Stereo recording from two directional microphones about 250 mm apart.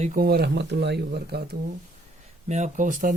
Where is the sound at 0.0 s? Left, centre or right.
Right.